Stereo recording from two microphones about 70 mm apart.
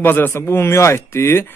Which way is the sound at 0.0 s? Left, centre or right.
Left.